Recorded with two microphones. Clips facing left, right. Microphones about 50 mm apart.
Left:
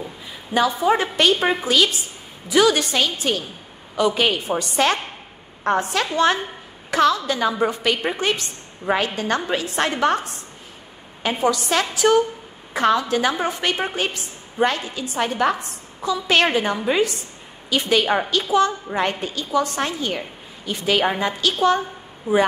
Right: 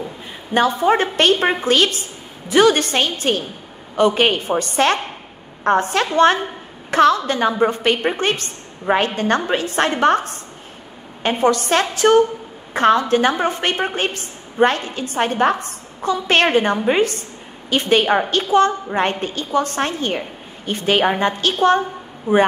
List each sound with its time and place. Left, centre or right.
0.6 s a woman's voice: right